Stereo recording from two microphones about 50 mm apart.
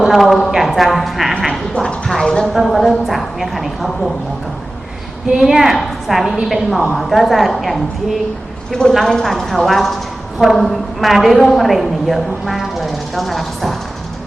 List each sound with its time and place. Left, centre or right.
0.0 s a woman's voice: centre
1.7 s speech: left
2.0 s a woman's voice: centre
5.4 s a woman's voice: centre
8.9 s a woman's voice: centre